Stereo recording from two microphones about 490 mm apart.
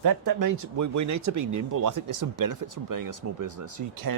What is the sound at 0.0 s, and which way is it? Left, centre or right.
Speech, right.